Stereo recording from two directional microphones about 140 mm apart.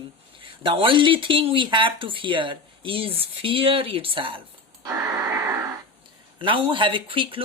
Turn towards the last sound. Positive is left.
turn(degrees=-40)  # may be behind; listen again after turning